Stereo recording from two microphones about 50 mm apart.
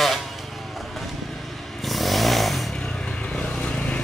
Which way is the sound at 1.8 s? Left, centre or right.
Centre.